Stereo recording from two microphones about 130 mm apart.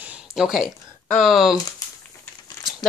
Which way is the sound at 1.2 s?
Centre (ahead or behind).